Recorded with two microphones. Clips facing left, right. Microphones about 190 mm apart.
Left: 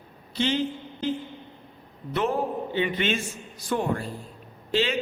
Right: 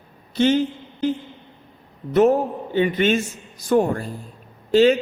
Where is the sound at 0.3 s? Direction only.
45° right (ahead or behind).